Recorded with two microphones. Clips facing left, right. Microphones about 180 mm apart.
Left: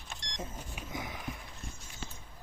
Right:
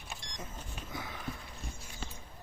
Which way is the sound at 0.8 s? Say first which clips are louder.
Left 2 dB; 15° left (ahead or behind).